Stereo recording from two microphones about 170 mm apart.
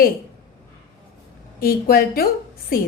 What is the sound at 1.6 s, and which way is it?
Speech, 60° left (ahead or behind).